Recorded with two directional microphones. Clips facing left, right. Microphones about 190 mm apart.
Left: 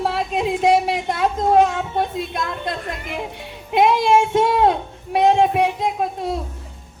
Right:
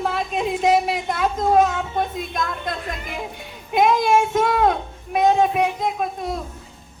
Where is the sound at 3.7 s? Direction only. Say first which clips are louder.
Left 2 dB; 30° left (ahead or behind).